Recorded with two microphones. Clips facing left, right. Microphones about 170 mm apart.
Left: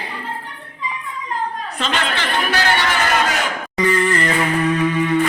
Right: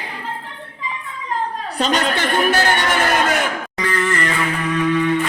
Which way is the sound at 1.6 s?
35° right (ahead or behind).